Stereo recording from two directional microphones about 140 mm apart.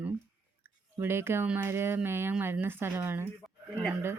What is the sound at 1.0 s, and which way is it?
Speech, 15° right (ahead or behind).